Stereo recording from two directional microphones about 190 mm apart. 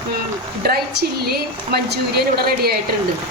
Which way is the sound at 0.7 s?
55° right (ahead or behind).